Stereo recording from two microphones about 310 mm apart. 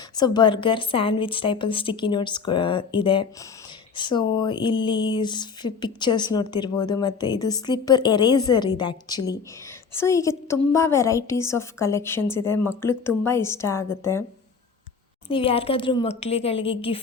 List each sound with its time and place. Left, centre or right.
0.2 s speech: centre
15.3 s speech: centre